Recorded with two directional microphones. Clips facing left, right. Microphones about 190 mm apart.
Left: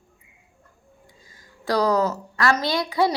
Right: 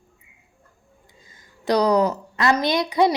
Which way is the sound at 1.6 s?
20° right (ahead or behind).